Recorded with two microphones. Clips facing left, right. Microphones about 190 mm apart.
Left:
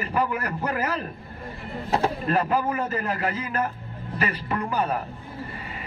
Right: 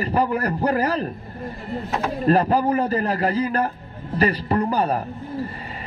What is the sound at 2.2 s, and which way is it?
A man's voice, 35° right (ahead or behind).